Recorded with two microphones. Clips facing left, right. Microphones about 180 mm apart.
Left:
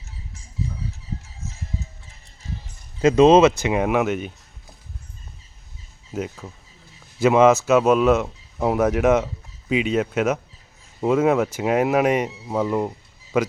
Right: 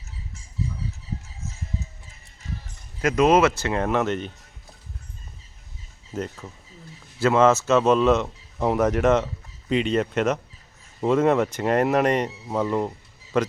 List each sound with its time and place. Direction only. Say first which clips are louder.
3.0 s speech: left 5 dB; 25° left (ahead or behind); by 4.3 s 10° left (ahead or behind)
6.1 s speech: left 2 dB; 5° left (ahead or behind)